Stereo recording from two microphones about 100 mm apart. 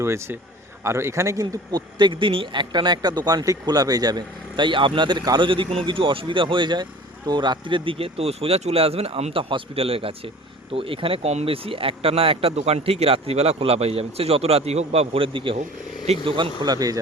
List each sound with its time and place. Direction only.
0.0 s speech: 25° right (ahead or behind)
2.0 s speech: 55° right (ahead or behind)
5.5 s speech: 60° right (ahead or behind)
16.7 s speech: 40° right (ahead or behind)